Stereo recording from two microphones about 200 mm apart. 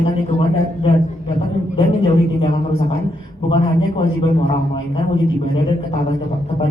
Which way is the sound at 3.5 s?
25° left (ahead or behind).